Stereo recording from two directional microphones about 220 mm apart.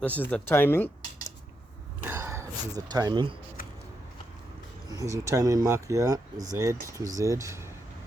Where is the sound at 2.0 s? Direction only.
10° right (ahead or behind).